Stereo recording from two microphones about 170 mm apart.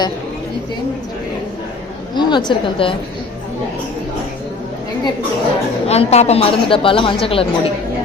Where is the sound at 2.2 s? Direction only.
25° left (ahead or behind).